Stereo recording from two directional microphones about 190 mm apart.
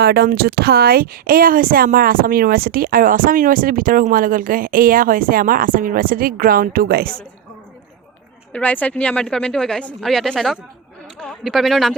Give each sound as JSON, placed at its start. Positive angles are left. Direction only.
{"t": 0.0, "sound": "speech", "side_deg": -60}
{"t": 8.5, "sound": "a woman's voice", "side_deg": 10}